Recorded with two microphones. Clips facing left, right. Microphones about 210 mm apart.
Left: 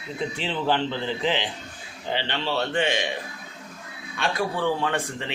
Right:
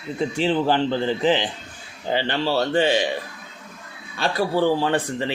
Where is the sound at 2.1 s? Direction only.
40° right (ahead or behind).